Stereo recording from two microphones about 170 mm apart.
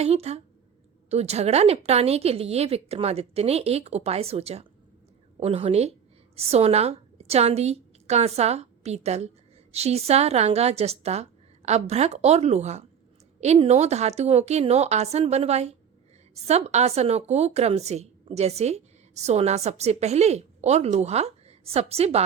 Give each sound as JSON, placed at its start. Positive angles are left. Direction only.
{"t": 0.0, "sound": "a woman's voice", "side_deg": -40}